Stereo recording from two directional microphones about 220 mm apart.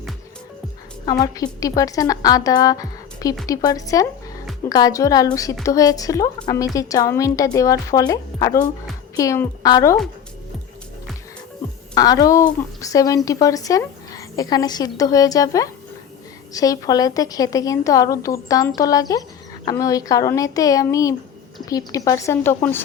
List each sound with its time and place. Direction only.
1.6 s a woman's voice: 15° left (ahead or behind)
11.9 s a woman's voice: 15° left (ahead or behind)